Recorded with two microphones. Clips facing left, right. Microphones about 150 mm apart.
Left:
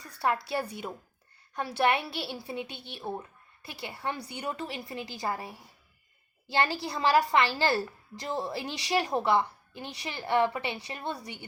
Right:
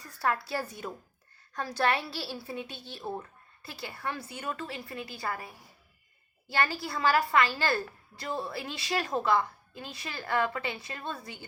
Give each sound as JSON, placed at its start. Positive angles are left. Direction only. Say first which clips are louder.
{"t": 0.5, "sound": "a woman's voice", "louder": "left 2 dB", "side_deg": 15}